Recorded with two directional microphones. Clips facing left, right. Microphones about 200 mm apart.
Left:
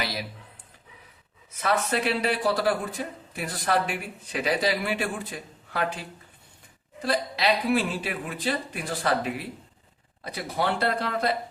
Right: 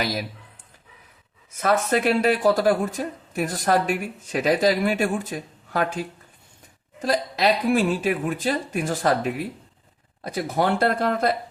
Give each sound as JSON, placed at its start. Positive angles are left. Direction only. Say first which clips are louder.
{"t": 0.0, "sound": "speech", "louder": "right 5 dB", "side_deg": -45}
{"t": 1.5, "sound": "speech", "louder": "right 5 dB", "side_deg": -45}